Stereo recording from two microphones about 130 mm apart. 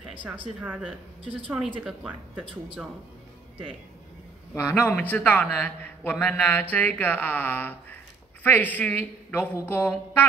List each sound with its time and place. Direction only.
0.6 s speech: 5° right (ahead or behind)
1.2 s speech: 40° right (ahead or behind)
1.8 s speech: 5° right (ahead or behind)
4.6 s a man's voice: 15° left (ahead or behind)